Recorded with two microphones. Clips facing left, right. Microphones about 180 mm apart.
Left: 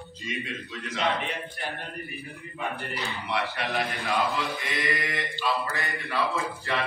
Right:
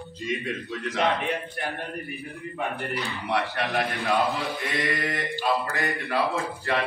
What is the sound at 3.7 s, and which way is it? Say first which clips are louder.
Speech: right 4 dB; 50° right (ahead or behind).